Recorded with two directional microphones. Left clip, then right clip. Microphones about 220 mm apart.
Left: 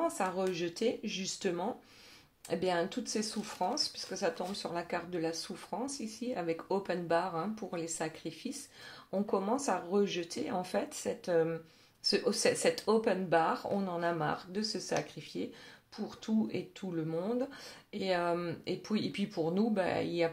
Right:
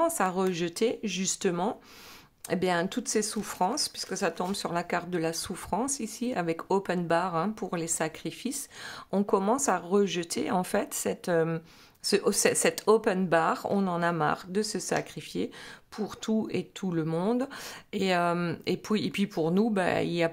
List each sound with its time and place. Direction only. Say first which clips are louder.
0.0 s speech: right 6 dB; 35° right (ahead or behind)